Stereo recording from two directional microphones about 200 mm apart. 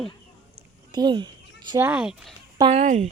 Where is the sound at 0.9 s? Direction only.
20° right (ahead or behind).